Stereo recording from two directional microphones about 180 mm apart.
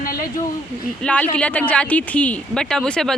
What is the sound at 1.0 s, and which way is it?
Speech, 5° left (ahead or behind).